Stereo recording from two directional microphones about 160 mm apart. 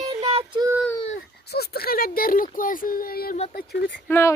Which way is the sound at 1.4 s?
85° left.